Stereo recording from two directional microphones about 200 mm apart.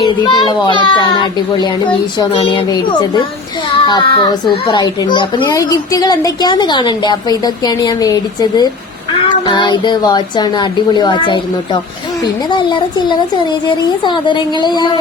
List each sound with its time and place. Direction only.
0.0 s a child's voice: 20° left (ahead or behind)